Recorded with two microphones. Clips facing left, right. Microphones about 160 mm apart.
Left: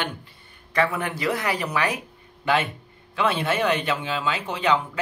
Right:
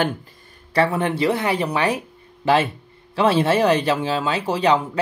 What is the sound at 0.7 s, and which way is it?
Speech, 30° right (ahead or behind).